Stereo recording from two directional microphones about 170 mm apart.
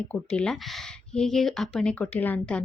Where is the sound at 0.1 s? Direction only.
5° left (ahead or behind).